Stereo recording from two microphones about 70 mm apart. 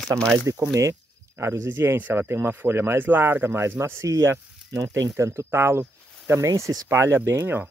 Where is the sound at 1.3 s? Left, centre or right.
Right.